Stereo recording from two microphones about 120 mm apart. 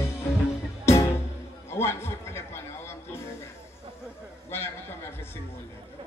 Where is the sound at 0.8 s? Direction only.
25° left (ahead or behind).